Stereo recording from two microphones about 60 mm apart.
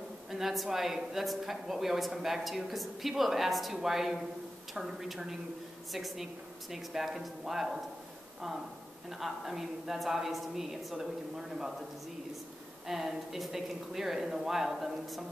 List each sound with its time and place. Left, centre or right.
0.3 s speech: centre
9.2 s speech: centre
12.8 s speech: centre